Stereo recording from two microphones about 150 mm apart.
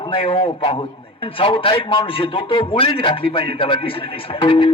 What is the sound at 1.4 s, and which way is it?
Speech, 35° left (ahead or behind).